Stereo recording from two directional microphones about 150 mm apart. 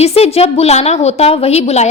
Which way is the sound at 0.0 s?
45° left (ahead or behind).